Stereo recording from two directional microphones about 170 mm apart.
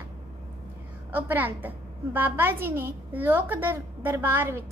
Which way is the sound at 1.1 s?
10° right (ahead or behind).